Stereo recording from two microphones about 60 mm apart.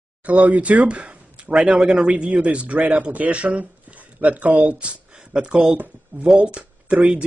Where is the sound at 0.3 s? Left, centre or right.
Right.